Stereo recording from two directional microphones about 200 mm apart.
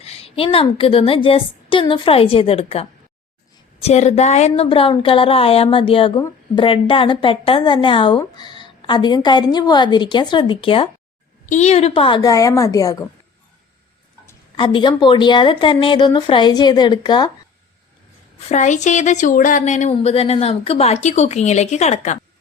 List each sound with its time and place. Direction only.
0.0 s speech: 30° left (ahead or behind)
3.8 s speech: 35° left (ahead or behind); by 13.0 s 15° left (ahead or behind)
14.3 s speech: 25° left (ahead or behind)
18.4 s a woman's voice: 35° left (ahead or behind)